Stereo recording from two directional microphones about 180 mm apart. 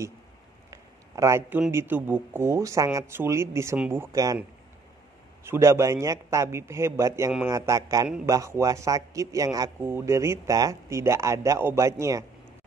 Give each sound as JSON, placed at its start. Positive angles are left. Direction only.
{"t": 0.7, "sound": "a sound", "side_deg": -15}
{"t": 1.7, "sound": "a man's voice", "side_deg": -10}
{"t": 5.4, "sound": "a man's voice", "side_deg": -15}